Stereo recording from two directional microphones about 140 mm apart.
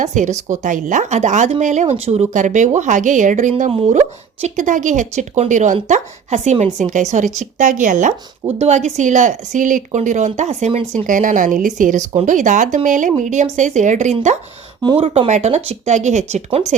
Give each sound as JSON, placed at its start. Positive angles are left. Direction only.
{"t": 0.0, "sound": "speech", "side_deg": -60}
{"t": 3.7, "sound": "speech", "side_deg": -50}
{"t": 11.0, "sound": "speech", "side_deg": -70}